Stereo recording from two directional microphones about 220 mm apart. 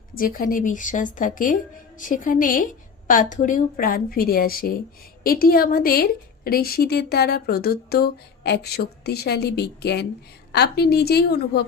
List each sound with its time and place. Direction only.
0.2 s a woman's voice: 40° left (ahead or behind)